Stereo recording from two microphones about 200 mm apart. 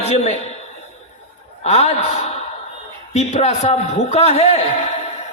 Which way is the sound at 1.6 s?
30° left (ahead or behind).